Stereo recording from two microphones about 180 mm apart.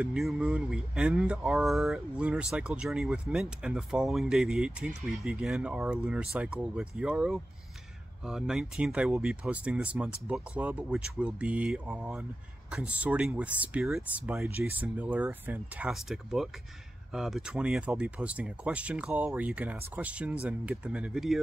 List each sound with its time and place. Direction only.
0.0 s speech: 5° right (ahead or behind)